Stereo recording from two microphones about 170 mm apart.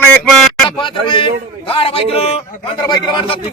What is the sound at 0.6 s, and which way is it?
A man's voice, 30° left (ahead or behind).